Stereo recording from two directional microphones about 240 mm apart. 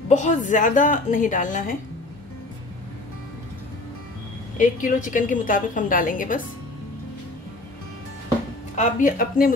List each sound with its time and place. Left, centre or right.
0.1 s a woman's voice: left
4.6 s a woman's voice: left
8.7 s a woman's voice: left